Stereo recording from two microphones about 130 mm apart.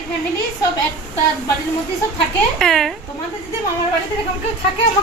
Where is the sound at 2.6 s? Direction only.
5° left (ahead or behind).